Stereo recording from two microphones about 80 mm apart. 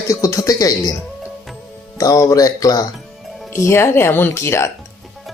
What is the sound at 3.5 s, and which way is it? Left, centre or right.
Speech, left.